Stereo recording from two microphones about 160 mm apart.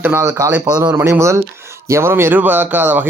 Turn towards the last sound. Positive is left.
turn(degrees=-10)  # may be behind; listen again after turning